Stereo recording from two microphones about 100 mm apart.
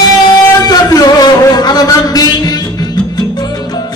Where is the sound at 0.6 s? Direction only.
40° left (ahead or behind).